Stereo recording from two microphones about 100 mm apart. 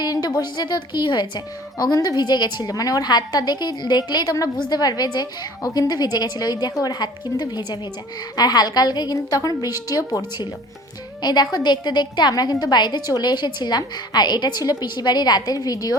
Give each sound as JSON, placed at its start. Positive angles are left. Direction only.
{"t": 0.0, "sound": "a woman's voice", "side_deg": 40}